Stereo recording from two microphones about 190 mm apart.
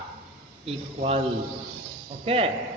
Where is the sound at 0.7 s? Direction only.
30° right (ahead or behind).